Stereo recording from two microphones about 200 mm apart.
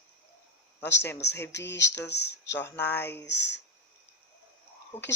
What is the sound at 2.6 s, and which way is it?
Speech, 10° left (ahead or behind).